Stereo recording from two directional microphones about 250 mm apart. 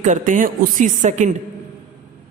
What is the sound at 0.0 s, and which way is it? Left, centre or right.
Speech, right.